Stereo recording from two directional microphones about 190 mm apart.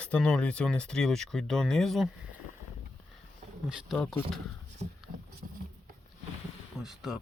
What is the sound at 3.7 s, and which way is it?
Speech, centre (ahead or behind).